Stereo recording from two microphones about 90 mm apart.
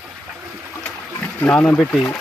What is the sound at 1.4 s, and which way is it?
Speech, 15° left (ahead or behind).